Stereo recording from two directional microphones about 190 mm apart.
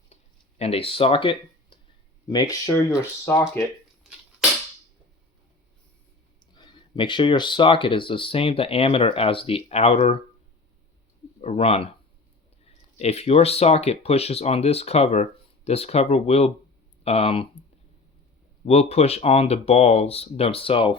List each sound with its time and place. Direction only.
0.6 s speech: 30° left (ahead or behind); by 3.4 s 10° left (ahead or behind)
6.5 s speech: 25° left (ahead or behind)
11.3 s speech: 35° left (ahead or behind)
18.6 s speech: 35° left (ahead or behind)